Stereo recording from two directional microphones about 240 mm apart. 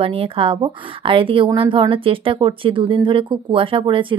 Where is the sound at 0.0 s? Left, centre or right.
Right.